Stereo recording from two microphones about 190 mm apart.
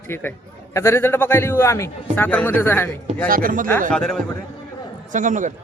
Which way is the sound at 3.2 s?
50° right (ahead or behind).